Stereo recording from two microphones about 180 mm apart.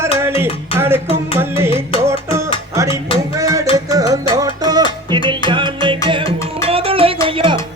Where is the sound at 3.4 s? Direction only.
20° right (ahead or behind).